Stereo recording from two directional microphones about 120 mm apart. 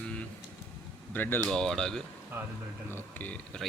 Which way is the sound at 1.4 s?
5° left (ahead or behind).